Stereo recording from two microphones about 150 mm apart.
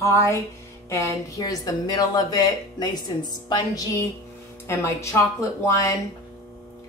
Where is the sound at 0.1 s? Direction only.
20° left (ahead or behind).